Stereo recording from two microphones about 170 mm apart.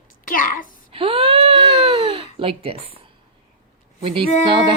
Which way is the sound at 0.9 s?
35° right (ahead or behind).